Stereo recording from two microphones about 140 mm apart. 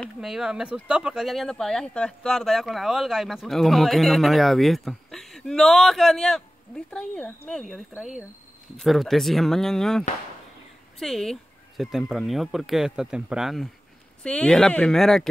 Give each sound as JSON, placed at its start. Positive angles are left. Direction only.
{"t": 0.2, "sound": "speech", "side_deg": -5}